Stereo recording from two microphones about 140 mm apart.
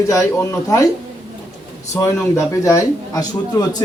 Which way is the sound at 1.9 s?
20° left (ahead or behind).